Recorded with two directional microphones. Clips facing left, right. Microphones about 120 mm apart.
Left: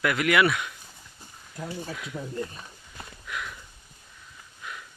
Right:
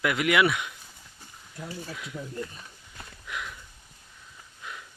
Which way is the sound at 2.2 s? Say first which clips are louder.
Left 2 dB; 90° left.